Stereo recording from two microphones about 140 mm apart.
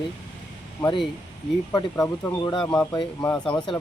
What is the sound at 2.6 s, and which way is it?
Speech, 10° left (ahead or behind).